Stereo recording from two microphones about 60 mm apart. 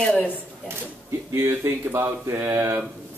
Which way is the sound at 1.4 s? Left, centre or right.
Right.